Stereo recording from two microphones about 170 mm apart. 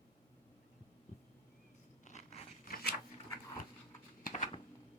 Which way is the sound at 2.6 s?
60° left (ahead or behind).